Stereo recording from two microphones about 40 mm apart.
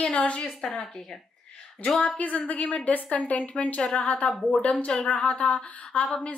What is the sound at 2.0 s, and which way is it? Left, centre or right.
A woman's voice, left.